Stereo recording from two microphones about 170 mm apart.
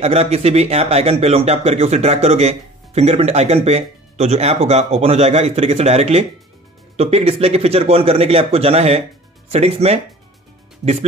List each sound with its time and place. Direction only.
0.0 s speech: 35° right (ahead or behind)